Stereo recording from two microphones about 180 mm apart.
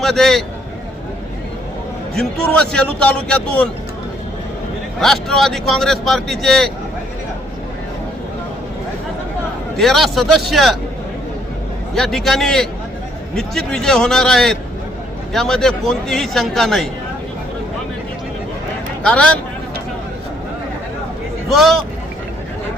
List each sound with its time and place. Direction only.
0.0 s a man's voice: centre (ahead or behind)
2.1 s speech: 5° left (ahead or behind)
4.9 s speech: centre (ahead or behind)
9.7 s speech: centre (ahead or behind)
11.9 s speech: centre (ahead or behind)
19.0 s speech: 5° left (ahead or behind)
21.5 s speech: centre (ahead or behind)